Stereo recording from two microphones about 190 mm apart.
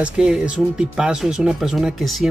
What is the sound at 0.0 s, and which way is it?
Speech, 5° right (ahead or behind).